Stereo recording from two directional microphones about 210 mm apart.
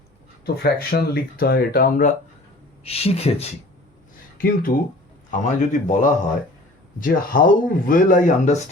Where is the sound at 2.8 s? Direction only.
30° left (ahead or behind).